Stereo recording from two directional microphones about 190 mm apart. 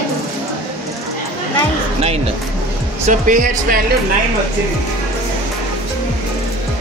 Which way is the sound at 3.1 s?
45° right (ahead or behind).